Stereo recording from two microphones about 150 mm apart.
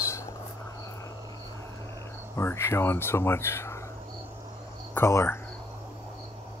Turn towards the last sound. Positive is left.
turn(degrees=15)  # may be behind; listen again after turning